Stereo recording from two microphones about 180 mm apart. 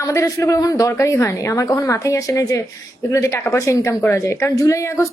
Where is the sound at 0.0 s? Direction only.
15° left (ahead or behind).